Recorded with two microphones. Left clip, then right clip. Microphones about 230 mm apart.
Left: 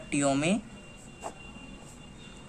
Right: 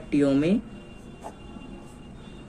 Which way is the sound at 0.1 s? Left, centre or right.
Left.